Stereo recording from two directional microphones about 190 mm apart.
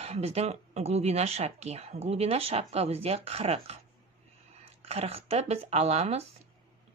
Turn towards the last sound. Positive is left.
turn(degrees=-35)  # may be behind; listen again after turning